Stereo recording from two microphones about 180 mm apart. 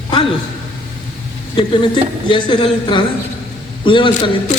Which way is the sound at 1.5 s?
25° left (ahead or behind).